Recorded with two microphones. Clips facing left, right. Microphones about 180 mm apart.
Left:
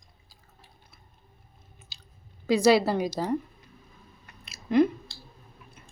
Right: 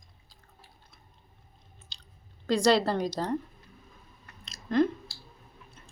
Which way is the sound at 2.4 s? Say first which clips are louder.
Left 3 dB; 5° left (ahead or behind).